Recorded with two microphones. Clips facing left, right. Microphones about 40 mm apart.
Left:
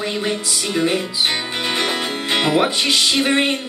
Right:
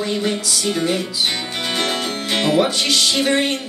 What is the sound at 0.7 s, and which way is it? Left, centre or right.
Speech, left.